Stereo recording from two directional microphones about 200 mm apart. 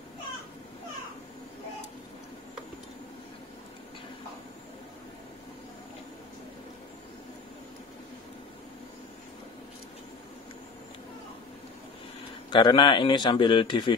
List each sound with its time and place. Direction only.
12.4 s a man's voice: 25° left (ahead or behind)